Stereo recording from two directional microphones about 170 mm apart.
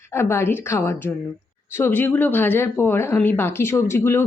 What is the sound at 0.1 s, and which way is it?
A woman's voice, 15° left (ahead or behind).